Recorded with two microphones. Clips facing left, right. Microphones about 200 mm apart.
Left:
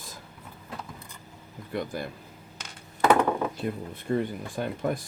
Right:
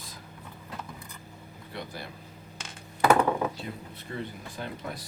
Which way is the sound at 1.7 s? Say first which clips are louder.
Left 8 dB; 50° left (ahead or behind).